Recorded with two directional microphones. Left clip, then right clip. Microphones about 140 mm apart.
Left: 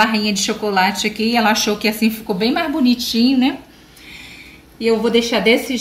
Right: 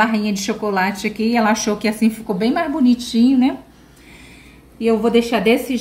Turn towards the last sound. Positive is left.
turn(degrees=-40)  # may be behind; listen again after turning